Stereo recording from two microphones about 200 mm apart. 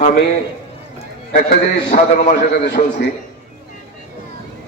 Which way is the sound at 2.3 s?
55° left (ahead or behind).